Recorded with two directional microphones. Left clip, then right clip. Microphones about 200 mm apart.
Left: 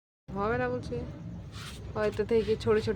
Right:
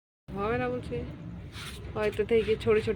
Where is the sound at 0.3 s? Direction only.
Centre (ahead or behind).